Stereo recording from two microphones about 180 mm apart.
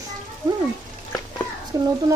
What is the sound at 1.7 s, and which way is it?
Speech, 20° right (ahead or behind).